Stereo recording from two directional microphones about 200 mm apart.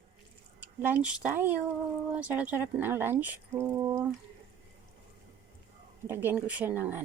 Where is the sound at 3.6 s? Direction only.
15° right (ahead or behind).